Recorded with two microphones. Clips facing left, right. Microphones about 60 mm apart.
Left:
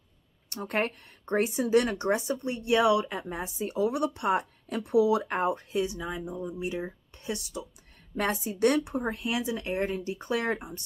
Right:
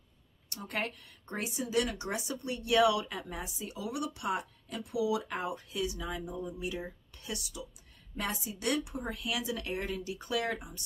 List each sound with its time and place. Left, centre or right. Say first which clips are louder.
0.5 s speech: left 7 dB; left
8.2 s a woman's voice: left 11 dB; left
9.0 s speech: left 5 dB; left